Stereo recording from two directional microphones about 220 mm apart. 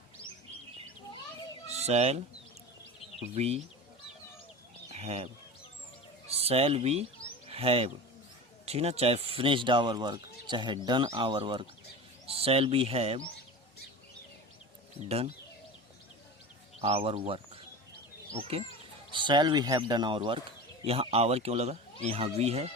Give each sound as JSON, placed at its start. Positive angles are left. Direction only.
{"t": 1.7, "sound": "speech", "side_deg": -30}
{"t": 3.3, "sound": "speech", "side_deg": -30}
{"t": 4.9, "sound": "speech", "side_deg": -30}
{"t": 7.4, "sound": "bird", "side_deg": -25}
{"t": 8.6, "sound": "speech", "side_deg": -30}
{"t": 16.8, "sound": "speech", "side_deg": -25}